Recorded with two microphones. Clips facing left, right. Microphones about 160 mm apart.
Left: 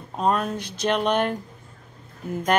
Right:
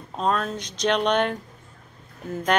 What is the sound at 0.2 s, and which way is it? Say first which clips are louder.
Speech: left 2 dB; 10° left (ahead or behind).